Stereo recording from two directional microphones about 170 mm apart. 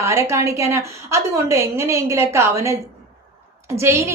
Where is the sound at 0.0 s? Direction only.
15° right (ahead or behind).